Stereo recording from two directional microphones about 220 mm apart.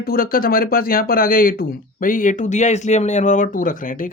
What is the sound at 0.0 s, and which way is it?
Speech, 40° left (ahead or behind).